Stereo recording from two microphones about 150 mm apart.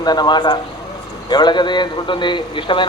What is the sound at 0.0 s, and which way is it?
Speech, 30° left (ahead or behind).